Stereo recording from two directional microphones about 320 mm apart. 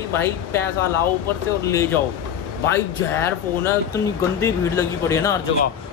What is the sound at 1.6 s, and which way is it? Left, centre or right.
Speech, centre.